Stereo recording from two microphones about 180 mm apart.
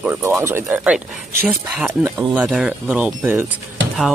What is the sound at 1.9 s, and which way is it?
Speech, 15° right (ahead or behind).